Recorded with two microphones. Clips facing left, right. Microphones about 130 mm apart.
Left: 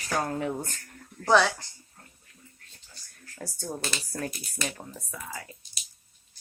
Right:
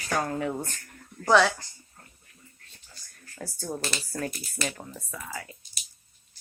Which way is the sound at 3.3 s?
Centre (ahead or behind).